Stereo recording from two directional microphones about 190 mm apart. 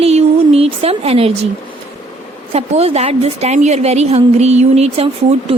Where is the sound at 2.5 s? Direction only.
35° right (ahead or behind).